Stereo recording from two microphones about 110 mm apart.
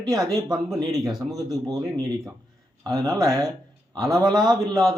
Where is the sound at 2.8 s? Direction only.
35° right (ahead or behind).